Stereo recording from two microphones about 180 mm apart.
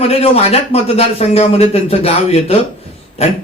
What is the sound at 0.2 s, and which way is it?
A man's voice, 35° left (ahead or behind).